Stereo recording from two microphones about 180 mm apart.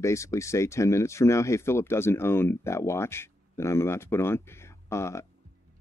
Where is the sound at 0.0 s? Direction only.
15° left (ahead or behind).